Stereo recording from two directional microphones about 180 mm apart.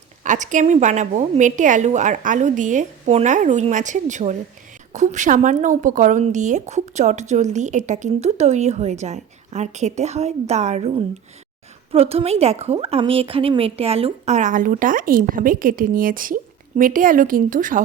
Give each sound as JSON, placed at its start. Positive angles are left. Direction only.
{"t": 0.2, "sound": "a woman's voice", "side_deg": -45}